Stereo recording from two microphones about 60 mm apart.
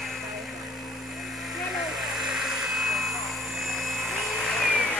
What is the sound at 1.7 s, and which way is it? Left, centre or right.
Vehicle, centre.